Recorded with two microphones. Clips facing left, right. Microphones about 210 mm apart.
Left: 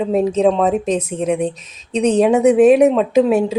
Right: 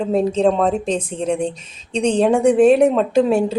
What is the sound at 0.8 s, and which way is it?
Speech, 30° right (ahead or behind).